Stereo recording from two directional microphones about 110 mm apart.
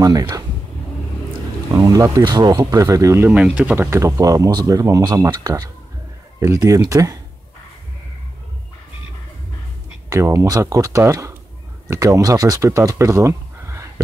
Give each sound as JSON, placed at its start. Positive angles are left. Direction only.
{"t": 0.0, "sound": "speech", "side_deg": -30}
{"t": 1.8, "sound": "speech", "side_deg": -30}
{"t": 3.3, "sound": "speech", "side_deg": -15}
{"t": 10.0, "sound": "speech", "side_deg": -25}